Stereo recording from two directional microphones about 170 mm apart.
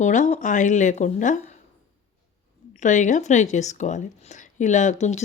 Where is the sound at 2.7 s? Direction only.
45° left (ahead or behind).